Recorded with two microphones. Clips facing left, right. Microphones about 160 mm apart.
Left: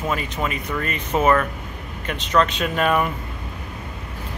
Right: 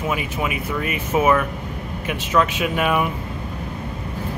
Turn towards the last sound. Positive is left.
turn(degrees=-10)  # may be behind; listen again after turning